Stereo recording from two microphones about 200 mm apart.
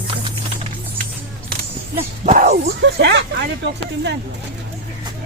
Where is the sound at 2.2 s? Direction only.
40° right (ahead or behind).